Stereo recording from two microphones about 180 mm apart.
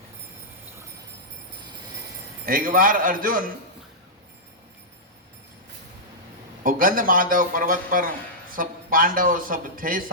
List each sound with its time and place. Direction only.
2.5 s a man's voice: 50° right (ahead or behind)
6.6 s a man's voice: 50° right (ahead or behind)